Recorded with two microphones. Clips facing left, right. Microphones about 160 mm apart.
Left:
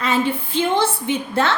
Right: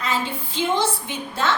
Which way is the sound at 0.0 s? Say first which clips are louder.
Left 6 dB; 60° left (ahead or behind).